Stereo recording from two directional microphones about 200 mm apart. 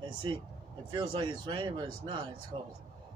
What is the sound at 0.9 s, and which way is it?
Speech, 25° right (ahead or behind).